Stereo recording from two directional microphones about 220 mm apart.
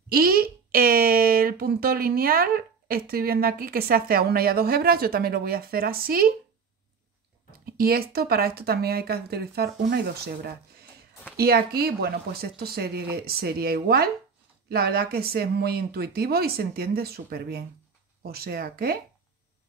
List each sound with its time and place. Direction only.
0.1 s speech: 45° right (ahead or behind)
7.6 s speech: 45° right (ahead or behind)